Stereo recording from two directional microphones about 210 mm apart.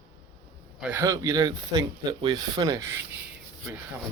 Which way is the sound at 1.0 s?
15° right (ahead or behind).